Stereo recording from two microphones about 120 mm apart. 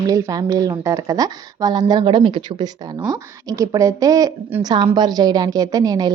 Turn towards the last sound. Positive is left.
turn(degrees=-35)  # may be behind; listen again after turning